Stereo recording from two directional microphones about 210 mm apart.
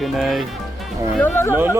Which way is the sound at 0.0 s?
Centre (ahead or behind).